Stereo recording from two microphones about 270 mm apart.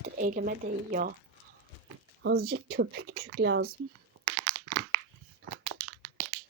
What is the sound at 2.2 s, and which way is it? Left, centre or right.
Speech, right.